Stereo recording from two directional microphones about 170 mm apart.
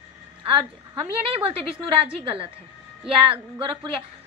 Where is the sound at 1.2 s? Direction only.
35° right (ahead or behind).